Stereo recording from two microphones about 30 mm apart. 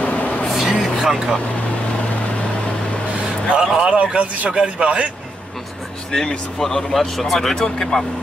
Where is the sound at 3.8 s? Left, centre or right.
Right.